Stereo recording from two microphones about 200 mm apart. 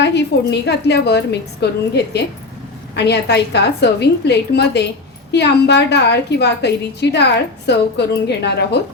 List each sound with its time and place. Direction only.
0.0 s a woman's voice: 55° left (ahead or behind)